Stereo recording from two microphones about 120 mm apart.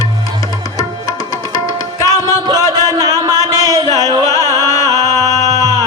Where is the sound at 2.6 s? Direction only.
30° left (ahead or behind).